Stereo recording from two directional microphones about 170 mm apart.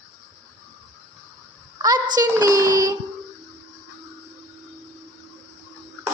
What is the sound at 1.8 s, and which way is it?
Speech, 25° right (ahead or behind).